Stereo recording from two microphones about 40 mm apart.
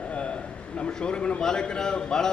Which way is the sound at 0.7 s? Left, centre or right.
Left.